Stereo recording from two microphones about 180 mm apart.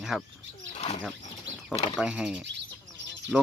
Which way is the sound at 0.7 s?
35° left (ahead or behind).